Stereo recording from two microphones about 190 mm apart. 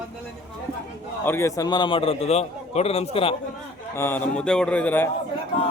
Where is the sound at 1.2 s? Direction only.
10° left (ahead or behind); by 3.3 s 30° left (ahead or behind).